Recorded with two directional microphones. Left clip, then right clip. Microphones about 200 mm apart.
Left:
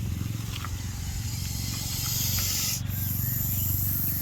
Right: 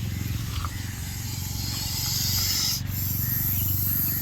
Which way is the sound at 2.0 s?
30° left (ahead or behind).